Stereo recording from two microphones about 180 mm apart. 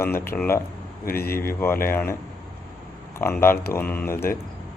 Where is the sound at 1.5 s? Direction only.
15° left (ahead or behind).